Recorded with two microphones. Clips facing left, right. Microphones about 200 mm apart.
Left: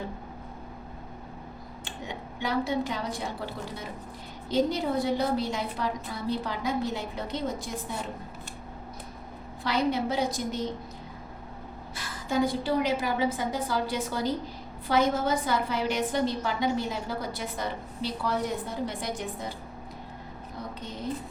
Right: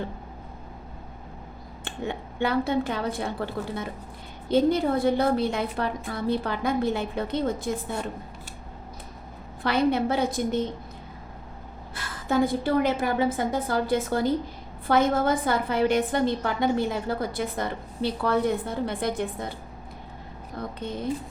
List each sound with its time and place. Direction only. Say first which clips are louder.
1.8 s a woman's voice: right 7 dB; 55° right (ahead or behind)
9.6 s a woman's voice: right 4 dB; 55° right (ahead or behind)
11.9 s a woman's voice: right 3 dB; 55° right (ahead or behind)